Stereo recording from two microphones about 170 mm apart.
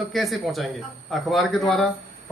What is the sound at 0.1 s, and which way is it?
A man's voice, centre (ahead or behind).